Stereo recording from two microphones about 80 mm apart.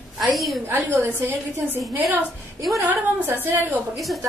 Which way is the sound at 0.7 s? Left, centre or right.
Right.